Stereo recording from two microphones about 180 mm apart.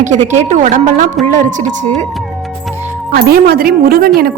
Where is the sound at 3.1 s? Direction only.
55° right (ahead or behind).